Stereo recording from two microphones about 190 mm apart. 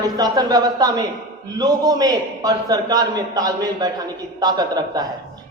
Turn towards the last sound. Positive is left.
turn(degrees=-20)  # may be behind; listen again after turning